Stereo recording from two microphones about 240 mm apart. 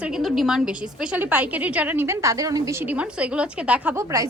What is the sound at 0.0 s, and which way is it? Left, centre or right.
A woman's voice, centre.